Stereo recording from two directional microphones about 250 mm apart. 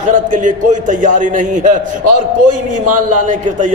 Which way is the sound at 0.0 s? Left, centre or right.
Right.